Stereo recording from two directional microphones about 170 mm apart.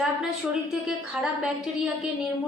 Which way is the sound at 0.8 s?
Centre (ahead or behind).